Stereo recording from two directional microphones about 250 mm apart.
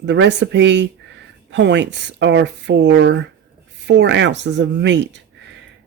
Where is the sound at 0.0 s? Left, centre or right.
Right.